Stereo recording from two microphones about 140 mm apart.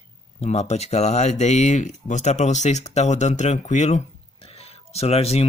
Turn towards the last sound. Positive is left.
turn(degrees=45)  # may be behind; listen again after turning